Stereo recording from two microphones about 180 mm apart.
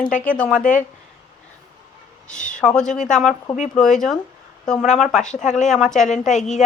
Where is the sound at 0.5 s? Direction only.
45° left (ahead or behind).